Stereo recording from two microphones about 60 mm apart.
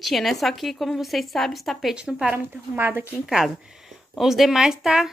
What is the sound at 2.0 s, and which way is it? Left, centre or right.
Speech, centre.